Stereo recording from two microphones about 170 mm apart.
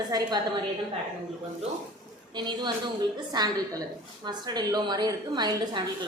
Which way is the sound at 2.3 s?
25° right (ahead or behind).